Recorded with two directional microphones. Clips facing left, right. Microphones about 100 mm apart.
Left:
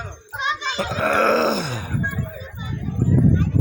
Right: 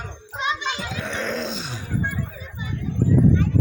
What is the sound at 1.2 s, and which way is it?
Groan, 90° left.